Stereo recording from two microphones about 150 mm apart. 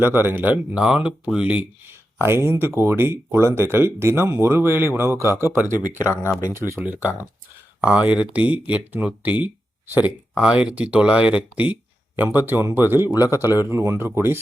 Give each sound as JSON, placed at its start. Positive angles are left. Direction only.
{"t": 0.0, "sound": "speech", "side_deg": -15}